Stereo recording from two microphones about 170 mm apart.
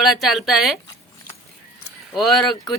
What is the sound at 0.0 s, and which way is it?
Speech, centre (ahead or behind).